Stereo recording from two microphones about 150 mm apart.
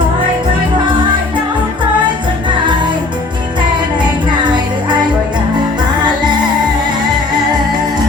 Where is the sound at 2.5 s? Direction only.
30° right (ahead or behind).